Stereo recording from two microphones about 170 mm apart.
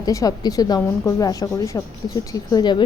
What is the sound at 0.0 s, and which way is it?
A woman's voice, 20° left (ahead or behind).